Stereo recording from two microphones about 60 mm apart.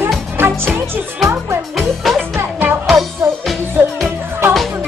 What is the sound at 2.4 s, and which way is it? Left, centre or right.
Music, right.